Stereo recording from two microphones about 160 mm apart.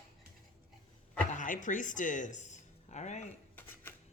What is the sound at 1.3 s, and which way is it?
Speech, 55° left (ahead or behind).